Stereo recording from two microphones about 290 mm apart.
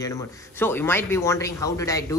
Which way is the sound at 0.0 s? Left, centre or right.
Centre.